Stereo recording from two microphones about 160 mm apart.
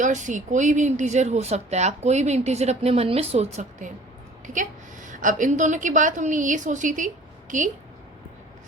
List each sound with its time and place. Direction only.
0.0 s a woman's voice: 50° right (ahead or behind)